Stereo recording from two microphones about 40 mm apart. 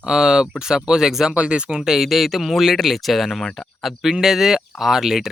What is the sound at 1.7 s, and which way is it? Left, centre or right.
Speech, centre.